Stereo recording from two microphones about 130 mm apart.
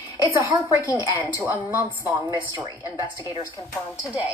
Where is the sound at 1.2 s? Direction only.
15° right (ahead or behind).